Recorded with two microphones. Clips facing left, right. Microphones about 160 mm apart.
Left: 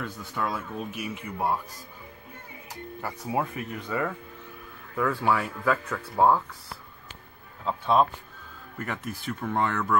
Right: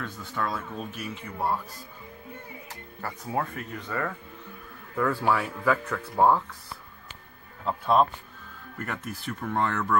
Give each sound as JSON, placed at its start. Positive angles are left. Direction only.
{"t": 0.0, "sound": "speech", "side_deg": 10}
{"t": 2.7, "sound": "speech", "side_deg": 10}
{"t": 4.9, "sound": "speech", "side_deg": 0}
{"t": 7.6, "sound": "speech", "side_deg": 0}